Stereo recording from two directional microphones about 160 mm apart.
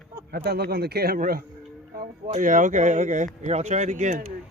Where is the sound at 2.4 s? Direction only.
55° right (ahead or behind).